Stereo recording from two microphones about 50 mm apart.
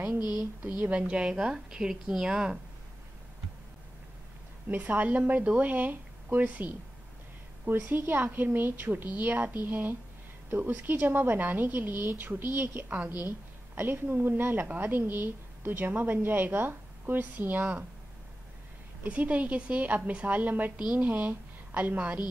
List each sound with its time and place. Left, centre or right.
0.9 s a woman's voice: right
4.6 s a woman's voice: right
7.6 s a woman's voice: right
8.9 s a woman's voice: right
12.8 s a woman's voice: right
19.0 s a woman's voice: right